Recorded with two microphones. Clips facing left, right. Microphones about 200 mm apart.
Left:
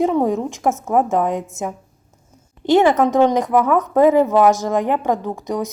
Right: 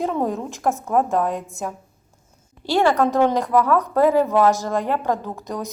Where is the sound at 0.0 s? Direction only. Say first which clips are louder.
Left 6 dB; 15° left (ahead or behind).